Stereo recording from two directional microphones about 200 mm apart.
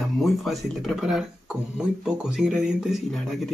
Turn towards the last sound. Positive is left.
turn(degrees=0)  # may be behind; listen again after turning